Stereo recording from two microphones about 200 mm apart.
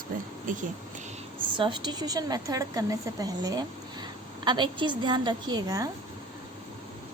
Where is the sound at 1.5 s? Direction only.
25° right (ahead or behind).